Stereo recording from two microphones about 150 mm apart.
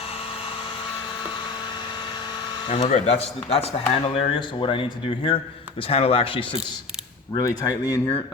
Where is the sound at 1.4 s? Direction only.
30° left (ahead or behind).